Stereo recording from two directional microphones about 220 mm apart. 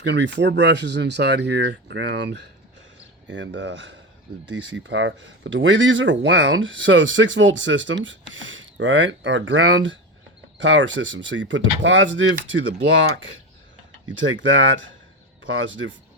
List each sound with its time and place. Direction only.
0.0 s speech: 50° right (ahead or behind)
14.2 s speech: 55° right (ahead or behind)